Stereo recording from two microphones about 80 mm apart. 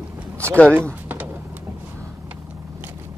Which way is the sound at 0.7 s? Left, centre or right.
Right.